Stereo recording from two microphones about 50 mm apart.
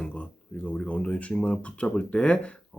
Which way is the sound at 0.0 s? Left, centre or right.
Left.